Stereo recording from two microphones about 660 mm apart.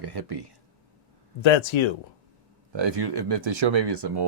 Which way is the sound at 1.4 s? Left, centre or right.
Left.